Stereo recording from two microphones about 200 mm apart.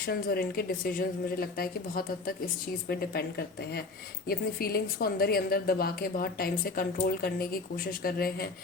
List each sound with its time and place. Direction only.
0.0 s a woman's voice: 50° left (ahead or behind)